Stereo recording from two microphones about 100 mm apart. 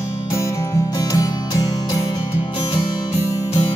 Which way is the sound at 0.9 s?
35° left (ahead or behind).